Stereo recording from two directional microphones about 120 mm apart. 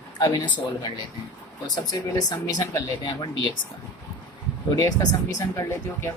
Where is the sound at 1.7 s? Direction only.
35° left (ahead or behind).